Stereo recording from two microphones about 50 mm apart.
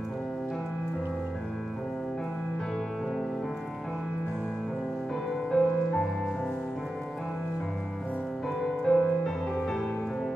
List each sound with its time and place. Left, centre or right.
5.5 s music: left
8.9 s music: centre